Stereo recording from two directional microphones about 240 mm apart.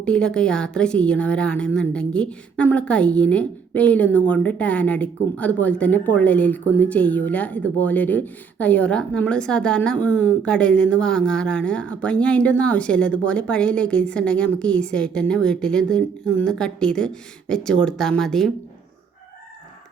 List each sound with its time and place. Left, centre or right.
0.0 s a woman's voice: centre